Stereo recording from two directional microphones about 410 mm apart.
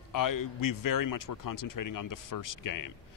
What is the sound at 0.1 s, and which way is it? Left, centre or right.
Speech, left.